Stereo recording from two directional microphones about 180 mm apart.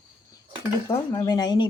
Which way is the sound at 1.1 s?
20° left (ahead or behind).